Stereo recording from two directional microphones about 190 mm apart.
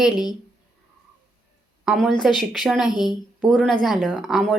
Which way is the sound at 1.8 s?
5° right (ahead or behind).